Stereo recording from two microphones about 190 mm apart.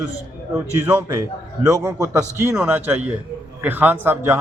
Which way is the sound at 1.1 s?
20° right (ahead or behind).